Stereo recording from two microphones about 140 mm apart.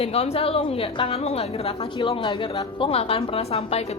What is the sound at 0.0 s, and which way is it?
Speech, 45° left (ahead or behind).